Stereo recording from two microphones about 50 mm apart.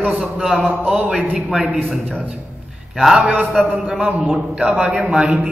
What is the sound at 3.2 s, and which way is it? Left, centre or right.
A man's voice, right.